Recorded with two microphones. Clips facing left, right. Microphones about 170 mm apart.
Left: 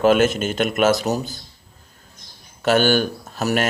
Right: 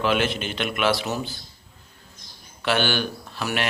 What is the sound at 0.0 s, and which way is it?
Speech, 45° left (ahead or behind).